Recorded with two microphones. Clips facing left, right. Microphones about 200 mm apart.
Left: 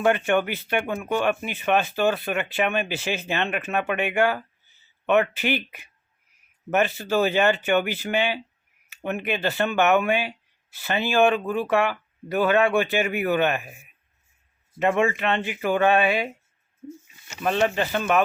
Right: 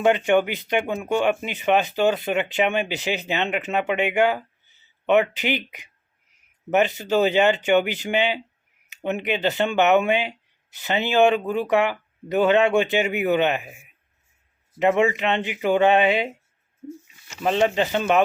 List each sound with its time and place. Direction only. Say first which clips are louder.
0.0 s speech: right 3 dB; 15° right (ahead or behind)
17.4 s speech: right 2 dB; 20° right (ahead or behind)